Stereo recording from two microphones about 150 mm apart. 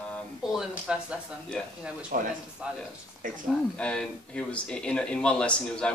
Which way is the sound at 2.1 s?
65° right (ahead or behind).